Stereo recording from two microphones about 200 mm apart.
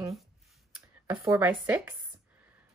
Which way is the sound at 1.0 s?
10° right (ahead or behind).